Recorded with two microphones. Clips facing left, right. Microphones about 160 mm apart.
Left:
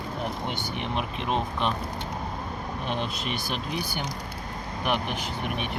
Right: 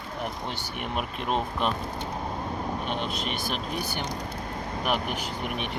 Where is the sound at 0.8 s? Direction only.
10° right (ahead or behind).